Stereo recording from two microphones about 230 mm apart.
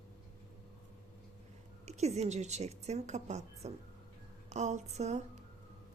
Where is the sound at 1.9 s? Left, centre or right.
Right.